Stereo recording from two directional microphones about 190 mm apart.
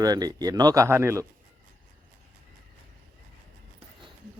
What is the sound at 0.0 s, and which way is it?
A man's voice, 20° right (ahead or behind).